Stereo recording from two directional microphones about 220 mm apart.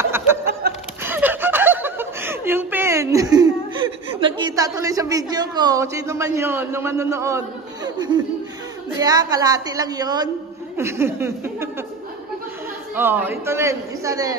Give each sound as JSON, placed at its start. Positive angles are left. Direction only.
{"t": 0.0, "sound": "a sound", "side_deg": -10}
{"t": 0.6, "sound": "chuckle", "side_deg": -45}
{"t": 1.0, "sound": "snicker", "side_deg": -10}
{"t": 4.2, "sound": "a man's voice", "side_deg": -20}
{"t": 12.9, "sound": "a man's voice", "side_deg": -10}